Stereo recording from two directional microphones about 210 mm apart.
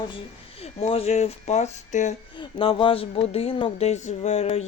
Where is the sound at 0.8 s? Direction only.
30° left (ahead or behind).